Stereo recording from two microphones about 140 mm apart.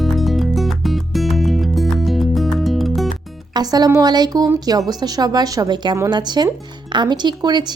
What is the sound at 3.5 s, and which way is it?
Speech, 30° right (ahead or behind).